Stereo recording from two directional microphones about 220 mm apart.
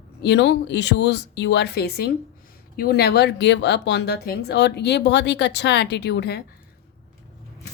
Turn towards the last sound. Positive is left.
turn(degrees=50)  # may be behind; listen again after turning